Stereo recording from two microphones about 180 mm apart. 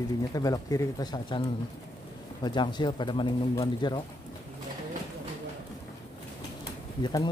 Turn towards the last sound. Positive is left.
turn(degrees=20)  # may be behind; listen again after turning